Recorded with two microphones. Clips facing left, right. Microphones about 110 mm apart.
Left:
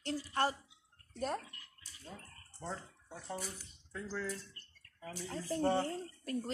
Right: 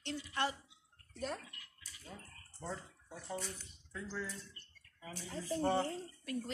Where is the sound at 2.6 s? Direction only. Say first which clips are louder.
Left 1 dB; 25° left (ahead or behind).